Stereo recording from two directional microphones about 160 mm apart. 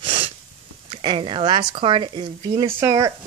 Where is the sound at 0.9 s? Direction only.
30° right (ahead or behind).